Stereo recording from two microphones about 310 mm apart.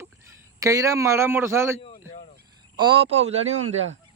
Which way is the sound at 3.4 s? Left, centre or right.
Right.